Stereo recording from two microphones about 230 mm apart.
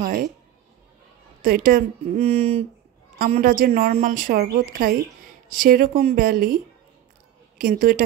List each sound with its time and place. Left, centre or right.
0.0 s music: right
1.4 s a woman's voice: right
3.2 s a woman's voice: right